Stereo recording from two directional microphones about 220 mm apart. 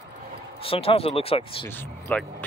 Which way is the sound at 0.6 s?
25° left (ahead or behind).